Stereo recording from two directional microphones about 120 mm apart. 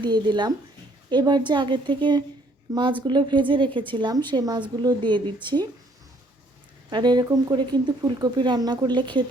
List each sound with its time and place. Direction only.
0.0 s speech: 40° right (ahead or behind)
6.9 s speech: 40° right (ahead or behind)